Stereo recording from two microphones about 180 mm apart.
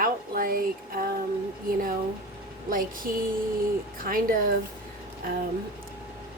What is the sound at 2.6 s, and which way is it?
Speech, 50° right (ahead or behind).